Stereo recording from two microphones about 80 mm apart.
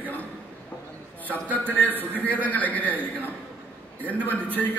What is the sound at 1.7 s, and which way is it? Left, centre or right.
Speech, right.